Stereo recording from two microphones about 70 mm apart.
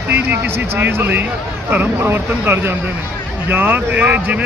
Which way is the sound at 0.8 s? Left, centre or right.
Right.